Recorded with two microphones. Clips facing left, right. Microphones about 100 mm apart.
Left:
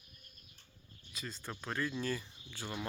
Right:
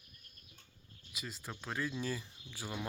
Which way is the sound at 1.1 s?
5° right (ahead or behind).